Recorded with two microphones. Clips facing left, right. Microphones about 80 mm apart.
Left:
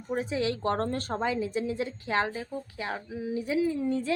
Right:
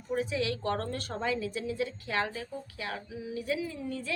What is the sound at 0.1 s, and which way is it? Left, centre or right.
A woman's voice, left.